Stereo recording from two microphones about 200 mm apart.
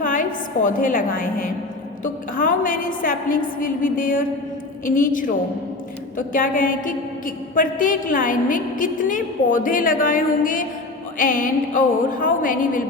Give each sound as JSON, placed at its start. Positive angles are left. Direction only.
{"t": 0.0, "sound": "a woman's voice", "side_deg": 40}